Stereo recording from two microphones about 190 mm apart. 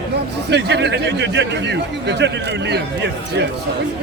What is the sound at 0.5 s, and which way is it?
Speech, 65° right (ahead or behind).